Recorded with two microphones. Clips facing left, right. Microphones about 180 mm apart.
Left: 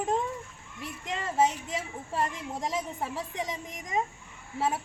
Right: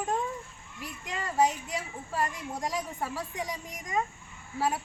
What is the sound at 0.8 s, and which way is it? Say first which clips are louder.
A child's voice: left 2 dB; 25° left (ahead or behind).